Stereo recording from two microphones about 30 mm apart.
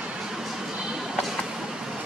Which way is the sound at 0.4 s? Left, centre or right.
Centre.